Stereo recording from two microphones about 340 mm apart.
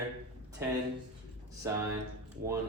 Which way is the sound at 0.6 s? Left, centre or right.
Centre.